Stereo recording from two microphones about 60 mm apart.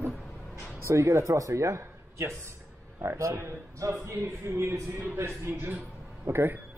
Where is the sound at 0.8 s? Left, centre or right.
Right.